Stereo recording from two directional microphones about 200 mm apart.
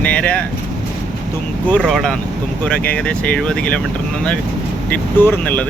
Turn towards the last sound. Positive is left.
turn(degrees=10)  # may be behind; listen again after turning